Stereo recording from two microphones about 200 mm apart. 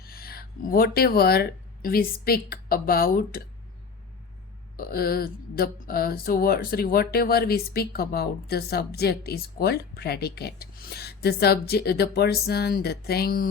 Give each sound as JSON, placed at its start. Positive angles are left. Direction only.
{"t": 0.0, "sound": "speech", "side_deg": 50}
{"t": 4.8, "sound": "speech", "side_deg": 50}